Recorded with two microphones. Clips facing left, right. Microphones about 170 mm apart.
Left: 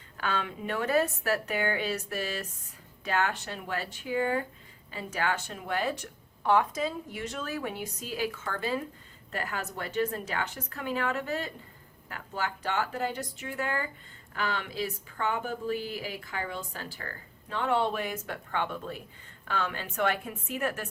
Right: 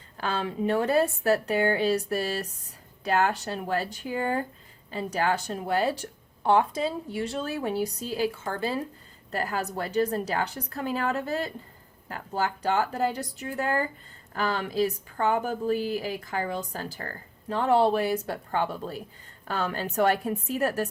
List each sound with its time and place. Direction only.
0.2 s speech: 35° right (ahead or behind)